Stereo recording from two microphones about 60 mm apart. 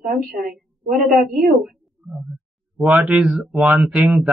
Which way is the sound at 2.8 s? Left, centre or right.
Right.